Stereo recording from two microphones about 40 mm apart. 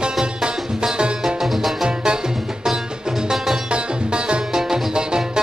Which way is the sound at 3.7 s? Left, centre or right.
Right.